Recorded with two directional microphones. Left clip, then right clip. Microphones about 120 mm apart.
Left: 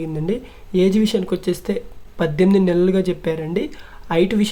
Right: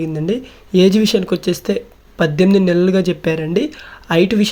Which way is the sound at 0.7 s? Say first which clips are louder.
Right 5 dB; 30° right (ahead or behind).